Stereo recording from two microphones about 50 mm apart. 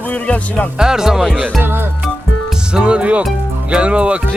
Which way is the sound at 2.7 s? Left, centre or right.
Right.